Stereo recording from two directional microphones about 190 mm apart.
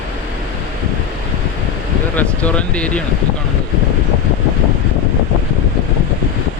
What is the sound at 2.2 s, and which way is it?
Speech, 5° left (ahead or behind).